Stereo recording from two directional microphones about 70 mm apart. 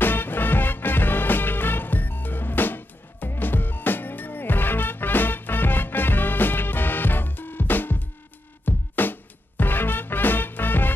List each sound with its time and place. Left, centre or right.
0.0 s music: left